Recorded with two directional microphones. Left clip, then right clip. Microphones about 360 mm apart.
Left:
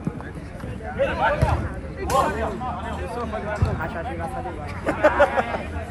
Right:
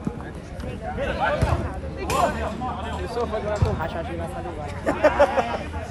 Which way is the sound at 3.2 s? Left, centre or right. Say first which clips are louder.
Right 4 dB; right.